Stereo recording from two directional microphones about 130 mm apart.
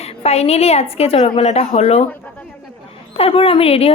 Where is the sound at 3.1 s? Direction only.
50° left (ahead or behind).